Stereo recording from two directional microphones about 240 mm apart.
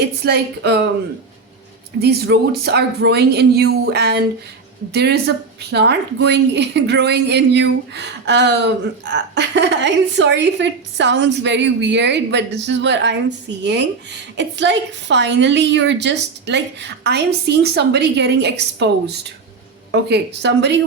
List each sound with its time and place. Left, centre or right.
0.0 s a woman's voice: right
2.0 s a woman's voice: right